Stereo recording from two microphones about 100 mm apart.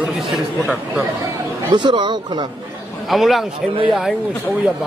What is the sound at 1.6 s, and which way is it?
Speech, 50° right (ahead or behind).